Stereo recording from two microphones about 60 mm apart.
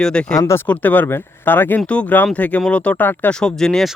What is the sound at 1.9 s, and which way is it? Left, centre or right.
Speech, centre.